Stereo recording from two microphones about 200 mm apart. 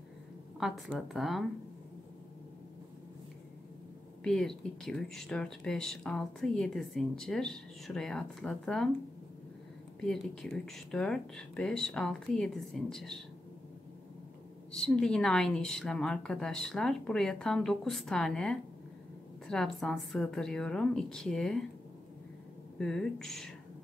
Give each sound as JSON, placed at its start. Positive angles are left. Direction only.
{"t": 0.6, "sound": "speech", "side_deg": 0}
{"t": 4.2, "sound": "speech", "side_deg": 0}
{"t": 9.9, "sound": "speech", "side_deg": 5}
{"t": 14.7, "sound": "speech", "side_deg": 5}
{"t": 22.8, "sound": "speech", "side_deg": 5}